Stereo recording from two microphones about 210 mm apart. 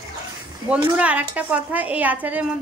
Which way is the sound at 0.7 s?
5° right (ahead or behind).